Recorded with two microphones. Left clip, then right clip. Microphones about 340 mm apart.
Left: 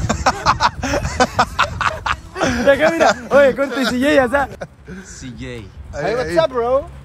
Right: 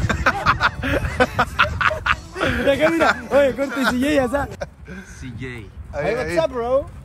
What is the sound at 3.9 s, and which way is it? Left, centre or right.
Speech, left.